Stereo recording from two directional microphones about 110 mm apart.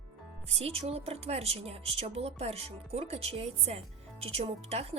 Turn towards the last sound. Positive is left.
turn(degrees=-65)  # may be behind; listen again after turning